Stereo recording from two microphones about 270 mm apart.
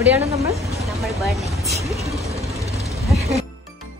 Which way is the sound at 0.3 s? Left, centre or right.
Centre.